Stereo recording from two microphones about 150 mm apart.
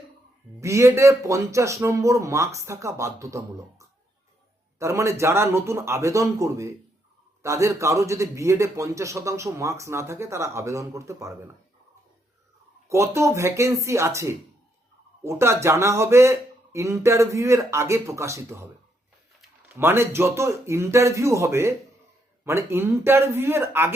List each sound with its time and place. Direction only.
0.6 s a man's voice: 20° right (ahead or behind)
12.9 s a man's voice: 20° right (ahead or behind)